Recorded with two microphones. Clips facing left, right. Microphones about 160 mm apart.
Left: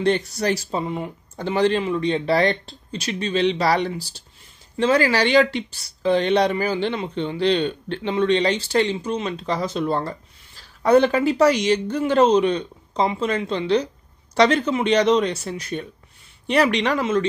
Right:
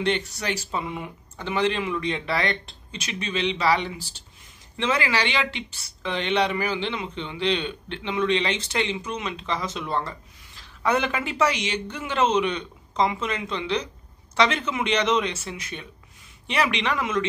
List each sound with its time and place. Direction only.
0.0 s speech: 40° left (ahead or behind)